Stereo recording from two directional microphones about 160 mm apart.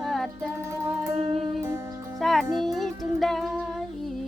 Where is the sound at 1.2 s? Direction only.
40° right (ahead or behind).